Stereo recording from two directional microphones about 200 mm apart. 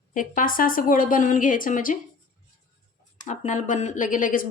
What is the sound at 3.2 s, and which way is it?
Speech, 40° left (ahead or behind).